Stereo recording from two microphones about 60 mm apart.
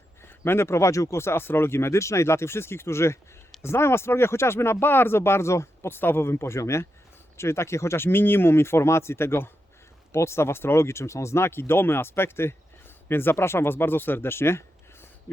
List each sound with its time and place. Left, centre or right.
0.2 s speech: left